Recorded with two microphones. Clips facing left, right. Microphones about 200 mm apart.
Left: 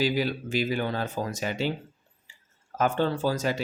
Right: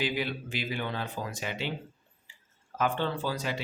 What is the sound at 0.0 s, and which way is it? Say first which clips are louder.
Speech: left 5 dB; 40° left (ahead or behind).